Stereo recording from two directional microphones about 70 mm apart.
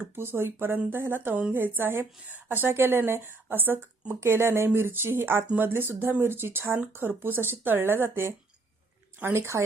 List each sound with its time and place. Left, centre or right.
0.0 s a woman's voice: right